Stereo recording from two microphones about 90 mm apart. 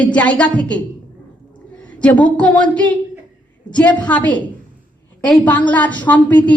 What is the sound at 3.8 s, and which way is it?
A woman's voice, 15° left (ahead or behind).